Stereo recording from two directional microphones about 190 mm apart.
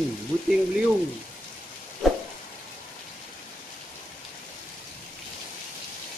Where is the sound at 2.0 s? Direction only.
Centre (ahead or behind).